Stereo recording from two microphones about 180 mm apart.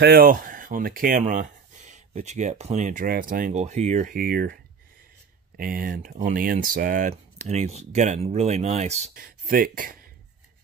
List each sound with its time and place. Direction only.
0.0 s speech: 55° right (ahead or behind)
5.6 s speech: 55° right (ahead or behind)
9.1 s speech: 50° right (ahead or behind)